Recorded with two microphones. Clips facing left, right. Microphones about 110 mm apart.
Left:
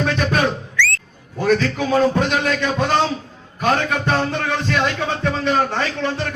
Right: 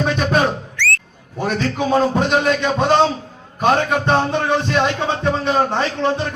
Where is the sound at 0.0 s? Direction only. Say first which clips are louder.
Right 1 dB; 20° right (ahead or behind).